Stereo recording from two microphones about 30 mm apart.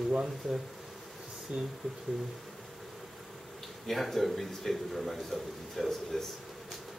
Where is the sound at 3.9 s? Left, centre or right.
Centre.